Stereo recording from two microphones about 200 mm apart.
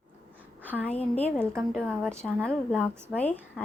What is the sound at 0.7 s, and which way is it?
Speech, centre (ahead or behind).